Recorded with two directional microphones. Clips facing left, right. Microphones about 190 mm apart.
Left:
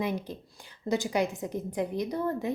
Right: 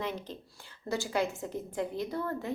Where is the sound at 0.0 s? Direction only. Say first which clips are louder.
Left 5 dB; 10° left (ahead or behind).